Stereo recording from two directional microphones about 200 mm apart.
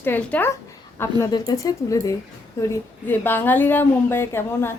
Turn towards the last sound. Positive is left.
turn(degrees=10)  # may be behind; listen again after turning